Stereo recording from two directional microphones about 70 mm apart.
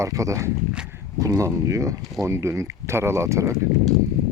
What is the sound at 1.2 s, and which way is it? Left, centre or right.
Speech, right.